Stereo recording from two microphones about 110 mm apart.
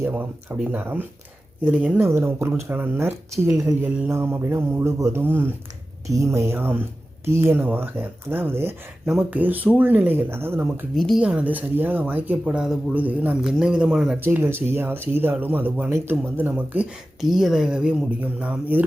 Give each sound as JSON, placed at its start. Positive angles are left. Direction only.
{"t": 0.0, "sound": "speech", "side_deg": -15}
{"t": 3.8, "sound": "speech", "side_deg": -15}
{"t": 10.9, "sound": "speech", "side_deg": 0}
{"t": 11.2, "sound": "speech", "side_deg": -10}
{"t": 14.2, "sound": "speech", "side_deg": -20}